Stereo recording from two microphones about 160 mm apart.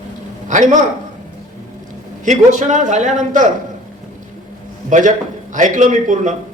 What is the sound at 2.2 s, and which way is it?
Speech, 50° right (ahead or behind).